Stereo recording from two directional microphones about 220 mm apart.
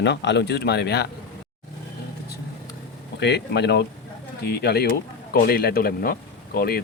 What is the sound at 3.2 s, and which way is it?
Speech, 50° left (ahead or behind).